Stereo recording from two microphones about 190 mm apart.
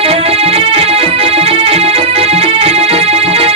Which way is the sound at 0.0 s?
30° right (ahead or behind).